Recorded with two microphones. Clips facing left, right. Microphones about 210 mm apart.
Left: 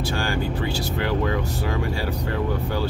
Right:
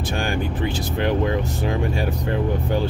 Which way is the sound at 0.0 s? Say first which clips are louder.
Right 1 dB; 20° right (ahead or behind).